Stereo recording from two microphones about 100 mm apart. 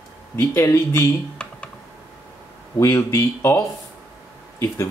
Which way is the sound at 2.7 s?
30° left (ahead or behind).